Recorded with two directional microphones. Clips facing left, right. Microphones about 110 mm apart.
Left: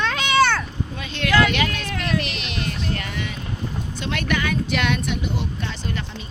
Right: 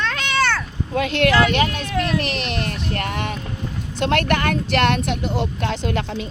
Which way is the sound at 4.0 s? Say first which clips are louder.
Right 6 dB; 70° right (ahead or behind).